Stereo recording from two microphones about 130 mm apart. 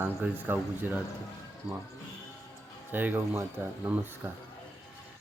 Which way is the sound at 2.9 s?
15° right (ahead or behind).